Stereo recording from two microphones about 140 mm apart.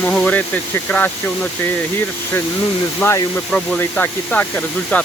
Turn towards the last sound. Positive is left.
turn(degrees=10)  # may be behind; listen again after turning